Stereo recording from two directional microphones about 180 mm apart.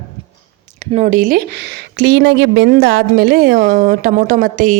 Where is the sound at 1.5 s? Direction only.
65° right (ahead or behind); by 4.7 s 50° right (ahead or behind).